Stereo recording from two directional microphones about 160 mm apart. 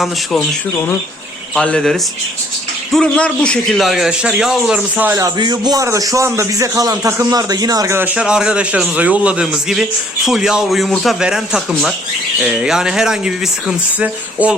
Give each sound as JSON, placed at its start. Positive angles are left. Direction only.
{"t": 0.0, "sound": "a man's voice", "side_deg": 0}
{"t": 1.5, "sound": "a man's voice", "side_deg": 5}
{"t": 5.1, "sound": "a man's voice", "side_deg": -25}